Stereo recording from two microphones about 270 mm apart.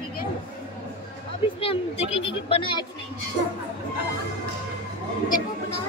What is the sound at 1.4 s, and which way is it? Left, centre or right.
A woman's voice, left.